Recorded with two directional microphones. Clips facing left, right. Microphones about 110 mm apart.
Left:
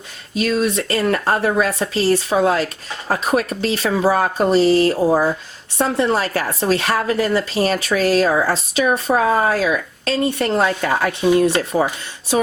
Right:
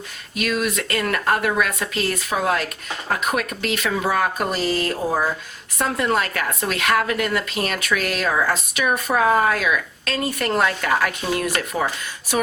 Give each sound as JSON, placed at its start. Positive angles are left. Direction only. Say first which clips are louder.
{"t": 0.3, "sound": "speech", "louder": "left 5 dB", "side_deg": 30}